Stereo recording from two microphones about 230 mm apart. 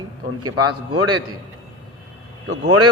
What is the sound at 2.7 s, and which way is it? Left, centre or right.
Speech, right.